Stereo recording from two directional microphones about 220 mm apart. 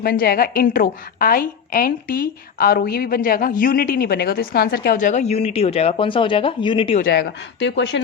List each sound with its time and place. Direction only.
0.0 s a woman's voice: 40° left (ahead or behind); by 7.0 s 25° left (ahead or behind)
7.0 s speech: 50° left (ahead or behind)